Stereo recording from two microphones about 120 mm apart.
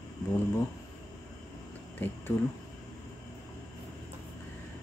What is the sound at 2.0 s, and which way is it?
Speech, 15° left (ahead or behind).